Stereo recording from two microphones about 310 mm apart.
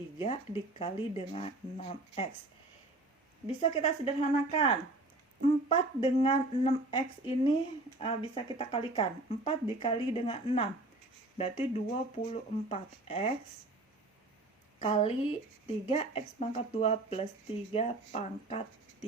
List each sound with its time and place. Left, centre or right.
0.2 s speech: centre
3.4 s speech: centre
14.8 s speech: centre